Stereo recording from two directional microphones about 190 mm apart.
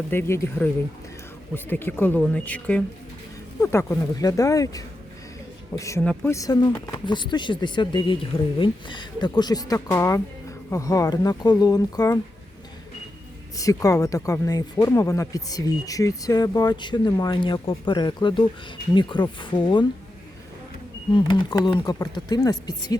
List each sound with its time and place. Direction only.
0.1 s speech: 10° left (ahead or behind)
13.6 s speech: 15° left (ahead or behind)
21.1 s speech: 25° left (ahead or behind)